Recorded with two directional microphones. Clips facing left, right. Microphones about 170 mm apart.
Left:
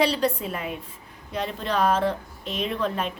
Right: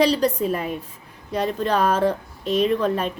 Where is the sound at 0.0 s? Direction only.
40° right (ahead or behind).